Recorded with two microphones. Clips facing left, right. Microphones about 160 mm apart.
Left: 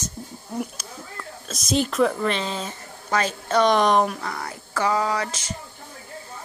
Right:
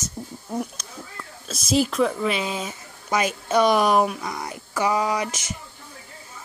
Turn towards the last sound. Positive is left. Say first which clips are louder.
# even
turn(degrees=-15)  # may be behind; listen again after turning